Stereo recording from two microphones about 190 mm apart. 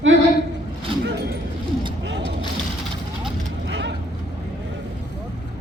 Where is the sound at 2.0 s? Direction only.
70° right (ahead or behind).